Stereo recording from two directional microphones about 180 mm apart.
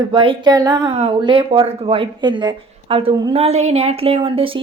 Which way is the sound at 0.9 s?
30° right (ahead or behind).